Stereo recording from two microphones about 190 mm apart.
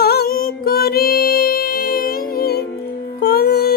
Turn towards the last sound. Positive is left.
turn(degrees=55)  # may be behind; listen again after turning